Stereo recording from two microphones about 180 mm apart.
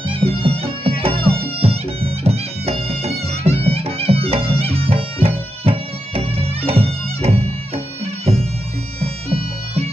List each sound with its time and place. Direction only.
0.1 s music: 30° right (ahead or behind)
9.0 s bagpipes: 35° right (ahead or behind)